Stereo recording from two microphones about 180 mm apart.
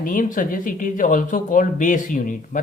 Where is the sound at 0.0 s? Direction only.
45° left (ahead or behind).